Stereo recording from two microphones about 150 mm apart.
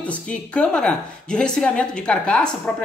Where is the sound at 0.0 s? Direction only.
10° left (ahead or behind).